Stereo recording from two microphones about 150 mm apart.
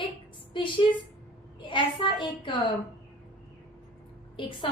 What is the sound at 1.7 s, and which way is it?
Speech, 35° left (ahead or behind).